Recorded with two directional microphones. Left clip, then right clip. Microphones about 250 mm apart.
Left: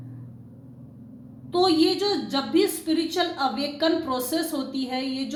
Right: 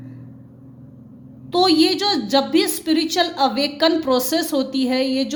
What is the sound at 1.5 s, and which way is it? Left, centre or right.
A woman's voice, right.